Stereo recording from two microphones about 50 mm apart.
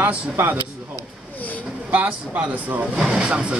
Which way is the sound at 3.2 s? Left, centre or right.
Right.